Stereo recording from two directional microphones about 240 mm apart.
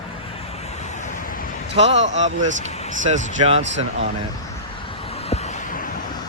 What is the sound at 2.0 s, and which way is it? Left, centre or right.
Speech, right.